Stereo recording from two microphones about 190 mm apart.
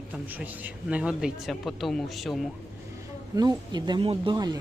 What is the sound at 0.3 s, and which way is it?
Speech, 10° right (ahead or behind).